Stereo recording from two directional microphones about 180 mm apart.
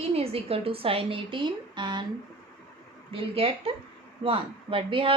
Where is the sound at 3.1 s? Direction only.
30° right (ahead or behind).